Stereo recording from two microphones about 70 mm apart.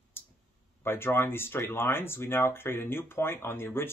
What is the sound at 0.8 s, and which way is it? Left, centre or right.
Speech, left.